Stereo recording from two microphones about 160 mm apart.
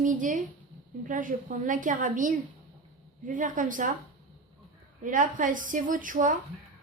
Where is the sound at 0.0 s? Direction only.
55° right (ahead or behind).